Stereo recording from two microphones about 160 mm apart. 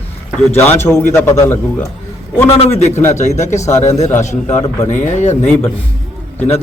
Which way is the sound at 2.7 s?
45° left (ahead or behind).